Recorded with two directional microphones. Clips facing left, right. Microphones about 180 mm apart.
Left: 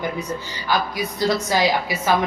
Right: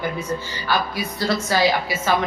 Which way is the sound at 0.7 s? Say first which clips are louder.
Left 1 dB; 15° left (ahead or behind).